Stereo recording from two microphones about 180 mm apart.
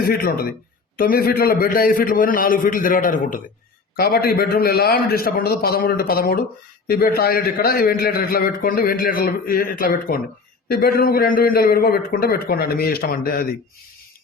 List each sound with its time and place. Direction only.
0.0 s a man's voice: 55° left (ahead or behind)